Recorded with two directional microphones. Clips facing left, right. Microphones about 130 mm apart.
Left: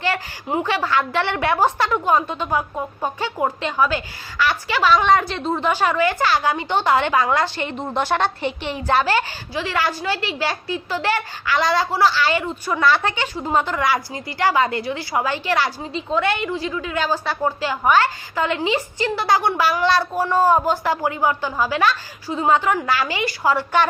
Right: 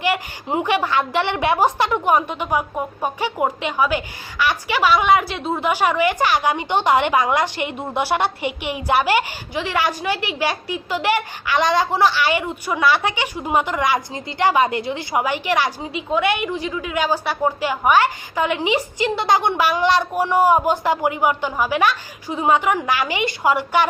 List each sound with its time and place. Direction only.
0.0 s a woman's voice: 20° right (ahead or behind)